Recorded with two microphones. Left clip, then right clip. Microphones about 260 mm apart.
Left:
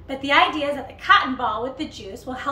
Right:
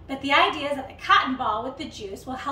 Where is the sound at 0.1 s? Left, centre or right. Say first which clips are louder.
Left 2 dB; centre.